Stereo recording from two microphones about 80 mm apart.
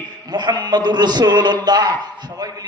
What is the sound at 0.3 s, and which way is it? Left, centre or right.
A man's voice, right.